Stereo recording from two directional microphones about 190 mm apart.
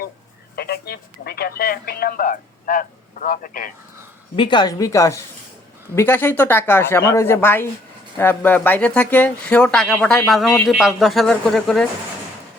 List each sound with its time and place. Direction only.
0.5 s speech: 55° left (ahead or behind)
4.4 s speech: 25° left (ahead or behind); by 11.9 s centre (ahead or behind)